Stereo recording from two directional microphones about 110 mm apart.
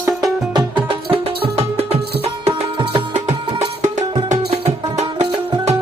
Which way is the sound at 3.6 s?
90° right.